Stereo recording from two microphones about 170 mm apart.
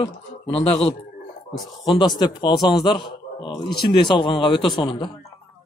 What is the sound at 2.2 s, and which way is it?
Speech, 25° left (ahead or behind).